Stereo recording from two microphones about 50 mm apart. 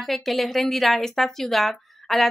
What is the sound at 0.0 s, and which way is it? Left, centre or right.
A woman's voice, centre.